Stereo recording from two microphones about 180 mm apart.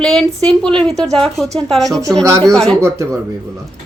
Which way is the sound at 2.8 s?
15° right (ahead or behind).